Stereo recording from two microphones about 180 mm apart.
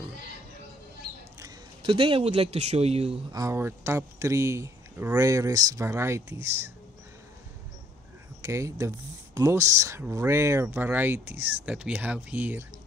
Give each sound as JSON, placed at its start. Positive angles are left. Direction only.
{"t": 1.4, "sound": "speech", "side_deg": -25}
{"t": 3.3, "sound": "speech", "side_deg": -20}
{"t": 8.4, "sound": "speech", "side_deg": -15}